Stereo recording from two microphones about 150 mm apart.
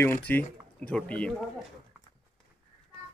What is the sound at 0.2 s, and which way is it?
Speech, 10° left (ahead or behind).